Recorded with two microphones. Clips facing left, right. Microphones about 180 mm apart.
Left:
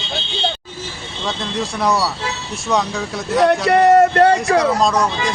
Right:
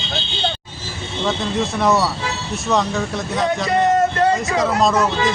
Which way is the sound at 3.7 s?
70° left (ahead or behind).